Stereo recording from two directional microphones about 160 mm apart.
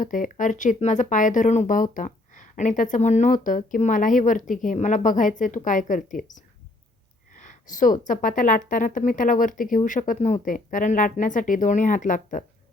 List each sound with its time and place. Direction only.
0.0 s a woman's voice: 55° left (ahead or behind)